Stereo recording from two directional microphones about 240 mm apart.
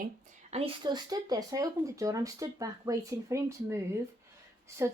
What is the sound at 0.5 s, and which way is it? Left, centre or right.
Speech, right.